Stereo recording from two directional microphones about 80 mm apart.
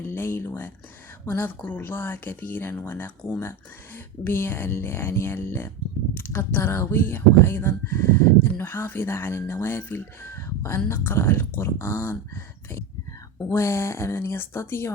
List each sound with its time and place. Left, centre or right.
0.1 s speech: left
4.2 s speech: left